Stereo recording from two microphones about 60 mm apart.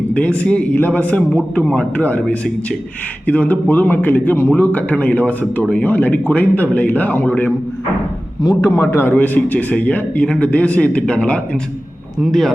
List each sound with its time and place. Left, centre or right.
0.1 s speech: left
8.4 s a man's voice: left
9.1 s speech: left
12.2 s speech: centre